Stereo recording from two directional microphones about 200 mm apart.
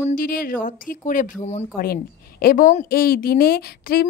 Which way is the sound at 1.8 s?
50° left (ahead or behind).